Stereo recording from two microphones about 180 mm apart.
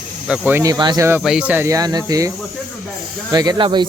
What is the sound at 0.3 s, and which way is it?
Speech, 10° right (ahead or behind).